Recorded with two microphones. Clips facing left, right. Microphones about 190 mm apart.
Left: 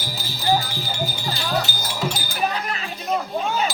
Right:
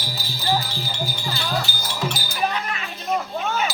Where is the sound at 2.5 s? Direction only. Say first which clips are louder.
Even; 35° left (ahead or behind).